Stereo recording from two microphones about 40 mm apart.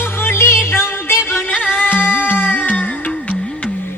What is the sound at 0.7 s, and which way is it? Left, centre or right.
Music, left.